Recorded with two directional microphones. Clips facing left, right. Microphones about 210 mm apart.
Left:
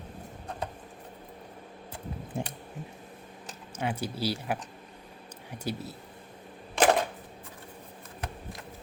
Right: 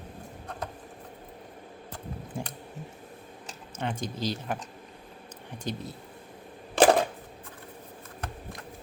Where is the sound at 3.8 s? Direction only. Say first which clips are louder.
Left 1 dB; 10° left (ahead or behind).